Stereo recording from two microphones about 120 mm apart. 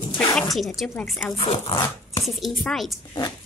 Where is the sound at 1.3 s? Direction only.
50° left (ahead or behind).